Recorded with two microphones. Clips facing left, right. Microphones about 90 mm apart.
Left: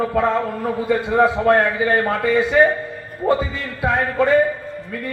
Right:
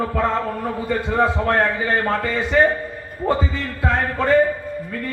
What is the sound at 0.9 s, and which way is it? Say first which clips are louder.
A man's voice: left 3 dB; 15° left (ahead or behind).